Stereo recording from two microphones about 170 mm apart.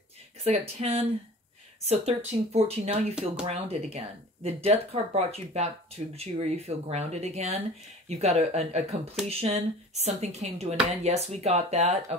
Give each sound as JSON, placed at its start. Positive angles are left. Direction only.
{"t": 0.4, "sound": "speech", "side_deg": -35}